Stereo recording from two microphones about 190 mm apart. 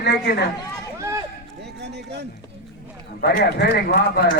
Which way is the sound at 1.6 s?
60° right (ahead or behind).